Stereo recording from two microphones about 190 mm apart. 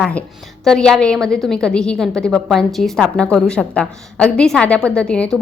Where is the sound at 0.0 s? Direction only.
5° left (ahead or behind).